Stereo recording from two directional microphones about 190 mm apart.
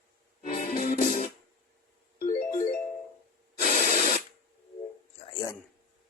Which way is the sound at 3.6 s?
45° left (ahead or behind).